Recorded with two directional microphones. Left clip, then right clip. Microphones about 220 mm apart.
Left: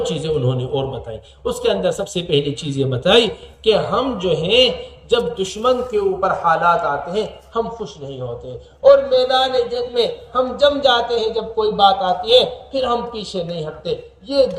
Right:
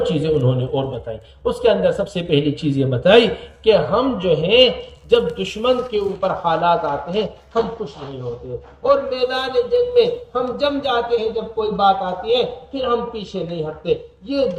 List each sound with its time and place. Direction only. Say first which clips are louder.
0.0 s speech: right 2 dB; 35° left (ahead or behind)
8.8 s a man's voice: left 6 dB; 25° left (ahead or behind)